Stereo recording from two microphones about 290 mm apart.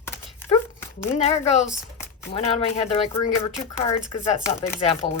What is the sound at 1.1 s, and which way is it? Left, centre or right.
Speech, left.